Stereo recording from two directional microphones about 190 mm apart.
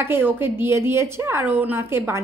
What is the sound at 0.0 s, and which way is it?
Speech, 10° right (ahead or behind).